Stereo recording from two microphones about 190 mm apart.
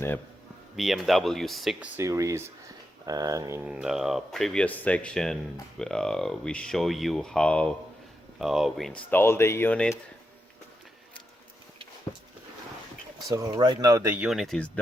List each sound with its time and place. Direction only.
0.8 s speech: centre (ahead or behind)
2.0 s speech: 15° right (ahead or behind); by 9.0 s centre (ahead or behind)
9.0 s speech: 10° left (ahead or behind)
13.2 s speech: 20° right (ahead or behind); by 14.7 s centre (ahead or behind)